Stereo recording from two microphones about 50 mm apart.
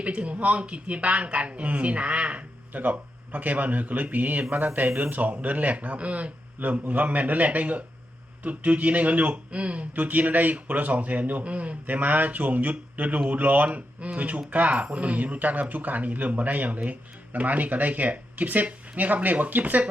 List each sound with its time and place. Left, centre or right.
0.0 s speech: right